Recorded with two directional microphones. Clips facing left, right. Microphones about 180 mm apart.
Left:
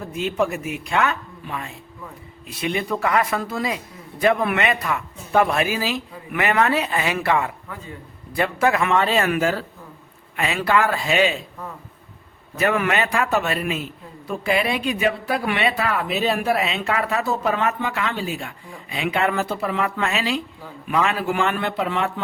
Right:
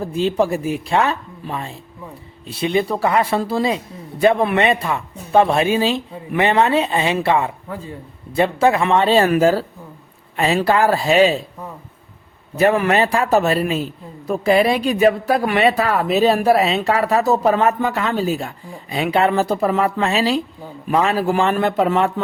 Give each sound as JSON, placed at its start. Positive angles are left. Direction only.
{"t": 0.0, "sound": "a man's voice", "side_deg": -30}
{"t": 12.5, "sound": "a man's voice", "side_deg": -35}